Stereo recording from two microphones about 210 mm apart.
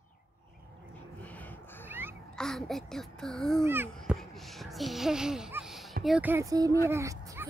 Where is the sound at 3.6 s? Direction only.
10° right (ahead or behind).